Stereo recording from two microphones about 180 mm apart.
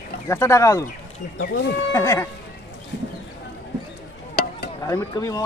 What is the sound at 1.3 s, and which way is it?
Speech, 70° left (ahead or behind).